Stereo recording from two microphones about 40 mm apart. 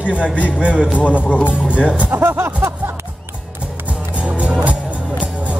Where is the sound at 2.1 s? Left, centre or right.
Right.